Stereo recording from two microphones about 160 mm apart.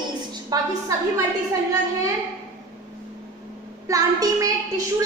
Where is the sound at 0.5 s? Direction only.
20° right (ahead or behind).